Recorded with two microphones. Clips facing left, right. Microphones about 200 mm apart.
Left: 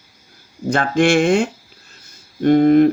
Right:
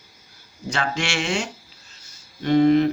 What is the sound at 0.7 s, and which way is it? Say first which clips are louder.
Speech: left 11 dB; 55° left (ahead or behind).